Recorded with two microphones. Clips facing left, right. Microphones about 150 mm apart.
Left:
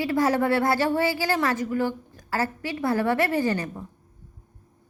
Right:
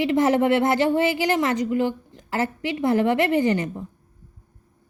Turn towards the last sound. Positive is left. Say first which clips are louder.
# right 4 dB
turn(degrees=-20)  # may be behind; listen again after turning